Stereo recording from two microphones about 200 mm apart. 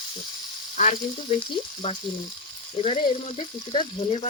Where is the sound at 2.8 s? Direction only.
30° left (ahead or behind).